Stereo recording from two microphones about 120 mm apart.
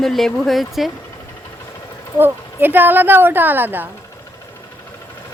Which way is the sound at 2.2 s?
15° right (ahead or behind).